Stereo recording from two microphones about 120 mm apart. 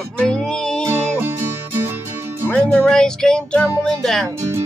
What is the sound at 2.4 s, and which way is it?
Music, 10° left (ahead or behind).